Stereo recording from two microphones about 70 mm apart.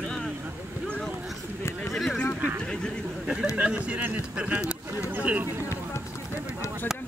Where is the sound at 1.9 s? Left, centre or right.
Centre.